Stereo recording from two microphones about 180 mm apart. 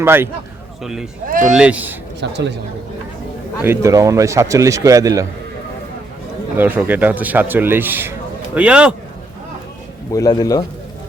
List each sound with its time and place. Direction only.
0.0 s a man's voice: 10° right (ahead or behind)
0.8 s a man's voice: centre (ahead or behind)
2.2 s speech: 75° right (ahead or behind)
3.6 s a man's voice: 15° right (ahead or behind)
6.6 s a man's voice: 10° right (ahead or behind)
10.1 s a man's voice: 20° left (ahead or behind)